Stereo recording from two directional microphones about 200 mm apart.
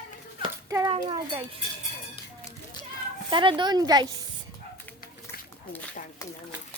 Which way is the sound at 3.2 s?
25° right (ahead or behind).